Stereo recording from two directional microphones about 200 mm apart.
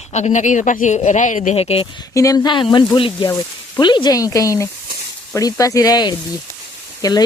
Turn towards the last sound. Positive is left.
turn(degrees=20)  # may be behind; listen again after turning